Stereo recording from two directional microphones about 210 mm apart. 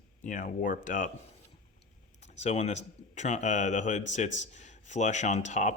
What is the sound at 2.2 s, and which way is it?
Speech, 30° left (ahead or behind).